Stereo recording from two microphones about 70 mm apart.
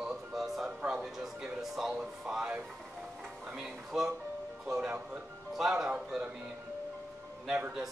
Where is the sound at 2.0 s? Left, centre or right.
Centre.